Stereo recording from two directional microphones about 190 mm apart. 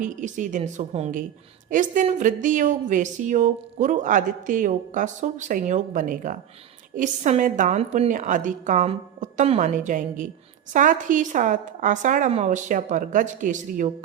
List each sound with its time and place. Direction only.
0.0 s speech: 40° right (ahead or behind)